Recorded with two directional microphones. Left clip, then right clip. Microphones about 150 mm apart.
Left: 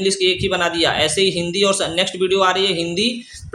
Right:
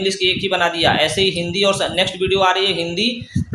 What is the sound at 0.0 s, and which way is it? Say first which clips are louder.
A man's voice: even; 25° left (ahead or behind).